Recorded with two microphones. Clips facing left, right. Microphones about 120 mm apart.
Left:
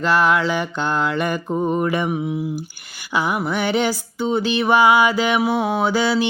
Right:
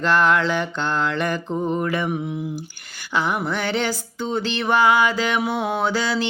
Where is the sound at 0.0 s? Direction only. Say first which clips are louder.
Left 1 dB; 5° left (ahead or behind).